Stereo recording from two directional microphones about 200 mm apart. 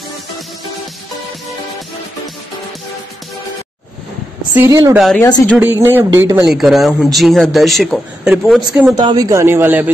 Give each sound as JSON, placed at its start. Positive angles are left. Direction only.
{"t": 4.6, "sound": "a man's voice", "side_deg": -15}
{"t": 4.9, "sound": "speech", "side_deg": 0}
{"t": 5.2, "sound": "speech", "side_deg": 15}
{"t": 5.6, "sound": "a man's voice", "side_deg": -10}
{"t": 9.0, "sound": "a man's voice", "side_deg": -20}